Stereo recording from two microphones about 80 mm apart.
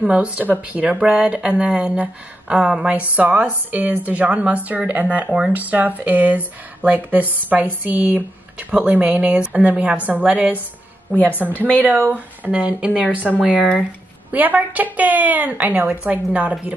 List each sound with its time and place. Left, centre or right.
0.0 s speech: centre
11.5 s speech: left
12.1 s speech: centre
13.4 s speech: centre
14.3 s speech: right